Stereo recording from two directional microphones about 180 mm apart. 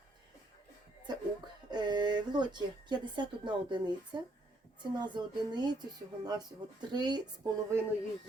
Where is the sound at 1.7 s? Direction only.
25° right (ahead or behind).